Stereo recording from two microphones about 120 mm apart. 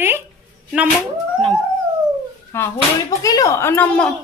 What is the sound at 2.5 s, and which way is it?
Speech, 25° left (ahead or behind).